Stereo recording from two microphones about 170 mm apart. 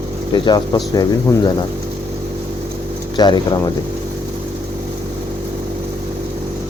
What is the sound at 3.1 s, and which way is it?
Speech, 25° left (ahead or behind).